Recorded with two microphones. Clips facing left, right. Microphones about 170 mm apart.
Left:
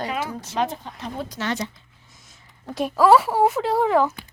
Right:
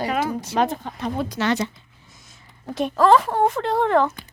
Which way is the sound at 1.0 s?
75° right (ahead or behind).